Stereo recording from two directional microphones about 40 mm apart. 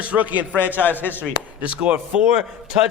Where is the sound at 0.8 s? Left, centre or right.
Left.